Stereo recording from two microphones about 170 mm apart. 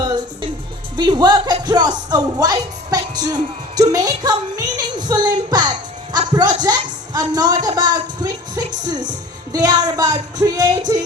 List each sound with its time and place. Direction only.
0.9 s speech: 25° right (ahead or behind)
1.6 s music: 25° right (ahead or behind)
3.9 s speech: 20° right (ahead or behind)